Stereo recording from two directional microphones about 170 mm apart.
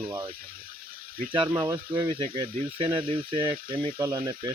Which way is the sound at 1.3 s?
30° right (ahead or behind).